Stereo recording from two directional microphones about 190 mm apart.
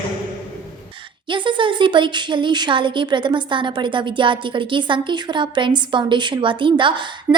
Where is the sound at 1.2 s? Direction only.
25° right (ahead or behind).